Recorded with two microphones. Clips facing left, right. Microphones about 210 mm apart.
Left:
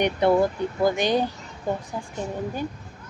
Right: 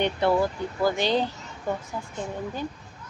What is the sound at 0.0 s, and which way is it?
Speech, 20° left (ahead or behind).